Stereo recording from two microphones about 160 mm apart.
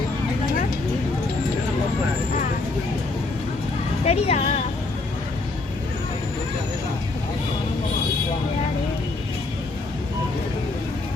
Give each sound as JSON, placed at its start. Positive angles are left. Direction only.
{"t": 4.0, "sound": "a woman's voice", "side_deg": 40}